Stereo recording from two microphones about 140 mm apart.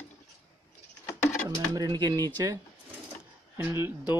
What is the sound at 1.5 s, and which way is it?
Speech, 25° right (ahead or behind).